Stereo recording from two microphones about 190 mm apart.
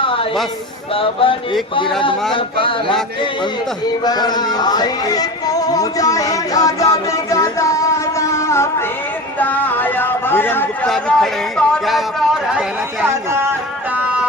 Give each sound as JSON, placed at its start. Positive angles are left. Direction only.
{"t": 0.9, "sound": "music", "side_deg": 30}
{"t": 4.0, "sound": "music", "side_deg": 20}
{"t": 9.4, "sound": "speech", "side_deg": 10}